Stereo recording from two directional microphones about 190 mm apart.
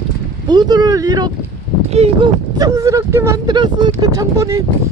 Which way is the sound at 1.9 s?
35° right (ahead or behind).